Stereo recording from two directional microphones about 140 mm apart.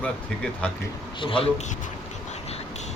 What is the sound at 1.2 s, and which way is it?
Speech, 40° left (ahead or behind).